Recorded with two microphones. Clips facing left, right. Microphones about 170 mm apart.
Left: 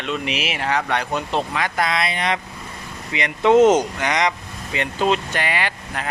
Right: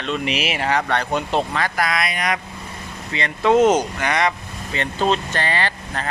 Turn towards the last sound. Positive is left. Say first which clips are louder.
# right 1 dB
turn(degrees=10)  # may be behind; listen again after turning